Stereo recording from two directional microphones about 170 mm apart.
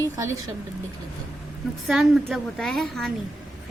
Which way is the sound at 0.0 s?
20° right (ahead or behind).